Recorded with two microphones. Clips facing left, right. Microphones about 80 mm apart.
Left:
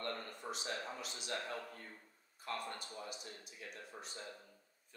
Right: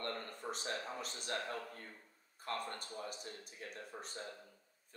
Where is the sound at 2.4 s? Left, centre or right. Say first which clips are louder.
Right 1 dB; right.